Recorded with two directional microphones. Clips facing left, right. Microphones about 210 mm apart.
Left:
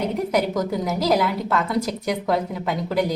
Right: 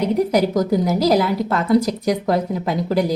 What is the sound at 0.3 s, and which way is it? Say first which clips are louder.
A woman's voice: right 5 dB; 35° right (ahead or behind).